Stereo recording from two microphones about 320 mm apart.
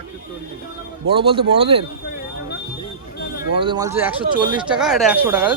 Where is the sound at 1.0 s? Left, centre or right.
Centre.